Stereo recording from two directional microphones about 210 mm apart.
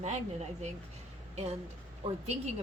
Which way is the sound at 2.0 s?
25° right (ahead or behind).